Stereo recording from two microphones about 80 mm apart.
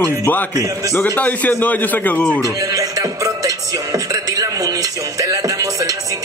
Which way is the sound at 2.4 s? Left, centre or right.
Right.